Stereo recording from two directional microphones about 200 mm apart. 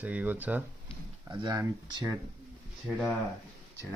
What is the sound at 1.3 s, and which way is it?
Speech, 20° right (ahead or behind).